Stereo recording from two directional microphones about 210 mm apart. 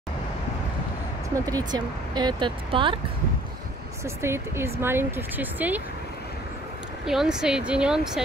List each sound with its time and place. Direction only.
1.4 s speech: 20° right (ahead or behind)
4.0 s speech: 10° right (ahead or behind)
7.1 s speech: centre (ahead or behind)